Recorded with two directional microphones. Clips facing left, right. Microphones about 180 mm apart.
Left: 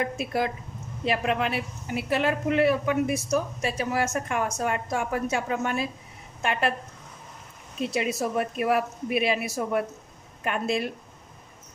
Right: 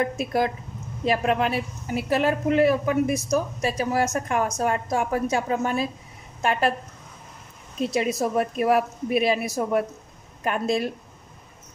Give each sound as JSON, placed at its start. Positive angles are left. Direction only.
{"t": 0.2, "sound": "a woman's voice", "side_deg": -40}
{"t": 7.8, "sound": "a woman's voice", "side_deg": -40}